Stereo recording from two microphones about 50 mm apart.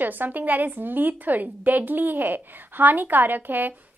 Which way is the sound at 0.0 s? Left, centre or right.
Right.